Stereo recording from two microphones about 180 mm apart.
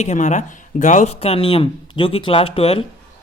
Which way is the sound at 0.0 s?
40° left (ahead or behind).